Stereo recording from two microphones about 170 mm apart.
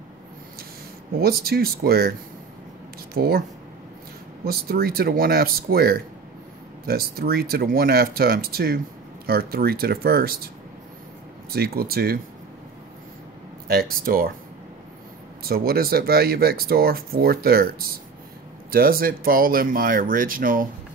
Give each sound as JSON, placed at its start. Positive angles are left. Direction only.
{"t": 1.2, "sound": "speech", "side_deg": -65}
{"t": 3.2, "sound": "speech", "side_deg": -60}
{"t": 4.5, "sound": "speech", "side_deg": -65}
{"t": 11.5, "sound": "speech", "side_deg": -65}
{"t": 13.7, "sound": "speech", "side_deg": -60}
{"t": 15.4, "sound": "speech", "side_deg": -65}